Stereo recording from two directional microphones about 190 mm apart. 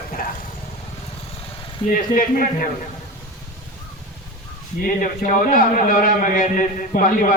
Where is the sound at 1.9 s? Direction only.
45° left (ahead or behind).